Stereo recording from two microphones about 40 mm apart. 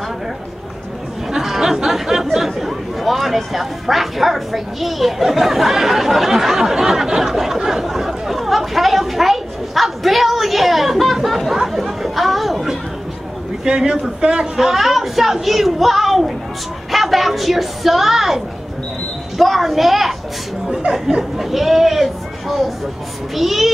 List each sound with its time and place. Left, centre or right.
1.3 s a sound: centre
2.3 s speech: centre
11.5 s chatter: centre
13.7 s speech: right
14.6 s speech: centre